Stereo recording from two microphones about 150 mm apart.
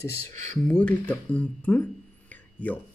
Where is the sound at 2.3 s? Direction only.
10° left (ahead or behind).